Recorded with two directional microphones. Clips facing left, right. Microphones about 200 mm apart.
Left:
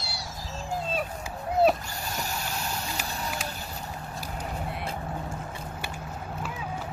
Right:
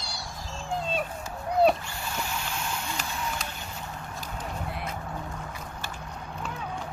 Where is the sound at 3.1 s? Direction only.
40° left (ahead or behind).